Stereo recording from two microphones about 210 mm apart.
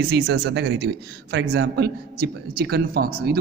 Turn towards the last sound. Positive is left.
turn(degrees=-45)  # may be behind; listen again after turning